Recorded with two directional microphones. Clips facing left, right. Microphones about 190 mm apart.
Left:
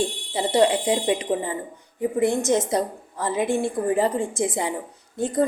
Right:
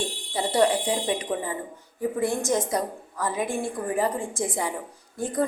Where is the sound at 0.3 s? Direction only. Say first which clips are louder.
Left 3 dB; 20° left (ahead or behind).